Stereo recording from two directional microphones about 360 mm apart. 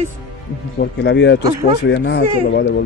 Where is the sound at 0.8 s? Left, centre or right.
Left.